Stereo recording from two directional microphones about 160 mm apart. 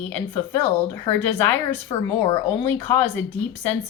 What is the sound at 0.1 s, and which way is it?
A woman's voice, 10° left (ahead or behind).